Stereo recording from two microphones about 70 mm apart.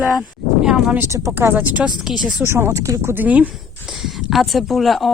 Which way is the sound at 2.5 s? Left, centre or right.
Right.